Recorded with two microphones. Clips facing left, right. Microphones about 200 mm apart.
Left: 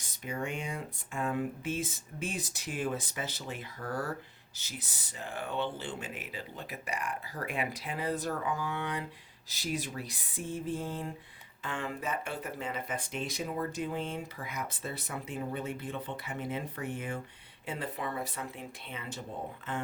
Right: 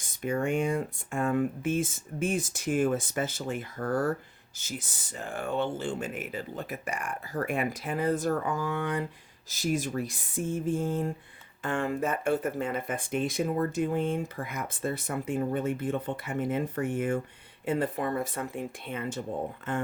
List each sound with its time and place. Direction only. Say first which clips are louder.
0.0 s speech: right 8 dB; 50° right (ahead or behind)